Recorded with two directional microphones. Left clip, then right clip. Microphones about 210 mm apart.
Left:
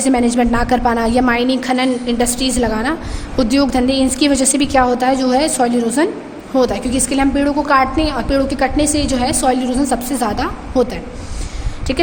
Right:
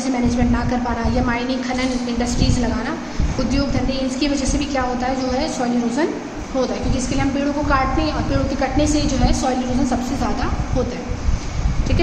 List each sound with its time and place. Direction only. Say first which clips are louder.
0.1 s a woman's voice: left 6 dB; 55° left (ahead or behind)
11.9 s a woman's voice: left 5 dB; 55° left (ahead or behind)